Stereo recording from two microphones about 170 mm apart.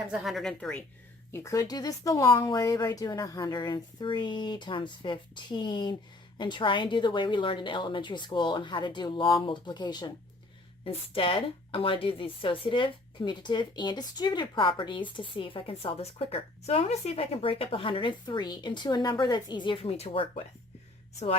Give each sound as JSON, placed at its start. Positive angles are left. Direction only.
{"t": 0.1, "sound": "a woman's voice", "side_deg": 0}
{"t": 1.3, "sound": "speech", "side_deg": 15}